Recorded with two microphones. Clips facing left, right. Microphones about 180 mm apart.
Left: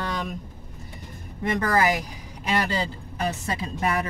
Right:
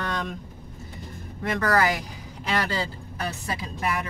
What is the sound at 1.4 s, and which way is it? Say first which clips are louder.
Speech: left 1 dB; 20° left (ahead or behind).